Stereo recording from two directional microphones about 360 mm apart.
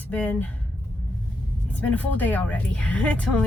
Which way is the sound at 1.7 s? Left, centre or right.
Centre.